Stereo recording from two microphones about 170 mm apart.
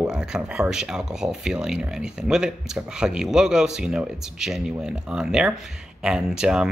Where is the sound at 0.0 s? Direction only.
5° right (ahead or behind).